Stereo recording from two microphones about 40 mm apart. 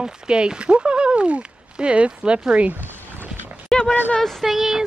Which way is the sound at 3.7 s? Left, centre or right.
Centre.